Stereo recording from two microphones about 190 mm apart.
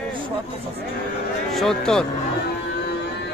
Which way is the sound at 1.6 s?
Centre (ahead or behind).